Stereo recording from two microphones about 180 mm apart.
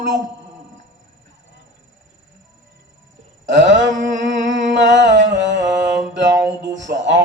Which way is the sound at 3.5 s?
85° right.